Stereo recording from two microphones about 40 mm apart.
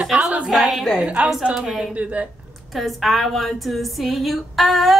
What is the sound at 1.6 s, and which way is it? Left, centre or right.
Speech, centre.